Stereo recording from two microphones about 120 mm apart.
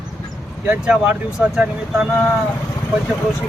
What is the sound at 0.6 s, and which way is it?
Speech, 10° right (ahead or behind).